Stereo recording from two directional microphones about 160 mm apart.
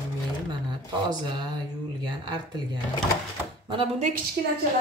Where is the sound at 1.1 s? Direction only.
25° right (ahead or behind).